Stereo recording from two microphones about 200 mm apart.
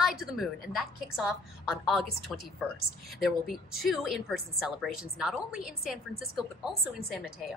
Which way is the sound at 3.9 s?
Centre (ahead or behind).